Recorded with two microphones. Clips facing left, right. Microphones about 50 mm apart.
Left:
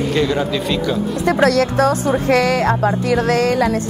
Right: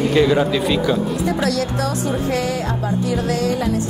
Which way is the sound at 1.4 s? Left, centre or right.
Left.